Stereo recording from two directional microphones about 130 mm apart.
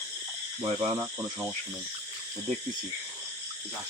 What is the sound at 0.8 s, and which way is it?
Speech, 25° right (ahead or behind).